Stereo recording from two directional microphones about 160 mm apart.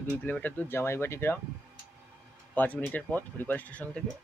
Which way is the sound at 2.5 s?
10° left (ahead or behind).